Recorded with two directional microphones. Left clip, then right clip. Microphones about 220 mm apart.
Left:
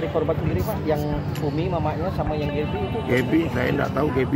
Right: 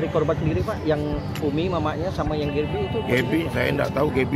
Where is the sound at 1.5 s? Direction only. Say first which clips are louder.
Even; 35° right (ahead or behind).